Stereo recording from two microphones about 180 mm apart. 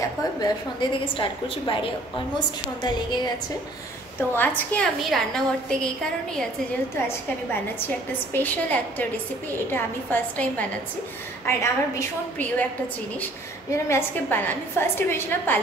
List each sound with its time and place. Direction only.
0.0 s a woman's voice: 25° left (ahead or behind)
4.3 s a woman's voice: 10° left (ahead or behind)
8.1 s a woman's voice: 10° left (ahead or behind)
13.7 s a woman's voice: 15° left (ahead or behind)